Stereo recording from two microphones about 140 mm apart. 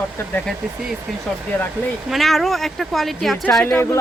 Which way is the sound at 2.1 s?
Centre (ahead or behind).